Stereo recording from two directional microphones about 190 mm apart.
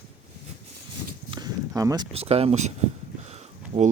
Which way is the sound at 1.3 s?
20° right (ahead or behind).